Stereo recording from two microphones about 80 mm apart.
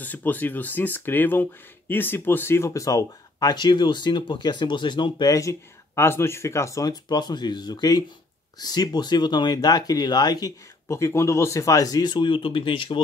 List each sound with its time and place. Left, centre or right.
0.0 s speech: left
5.3 s speech: left
6.9 s speech: left
10.9 s speech: left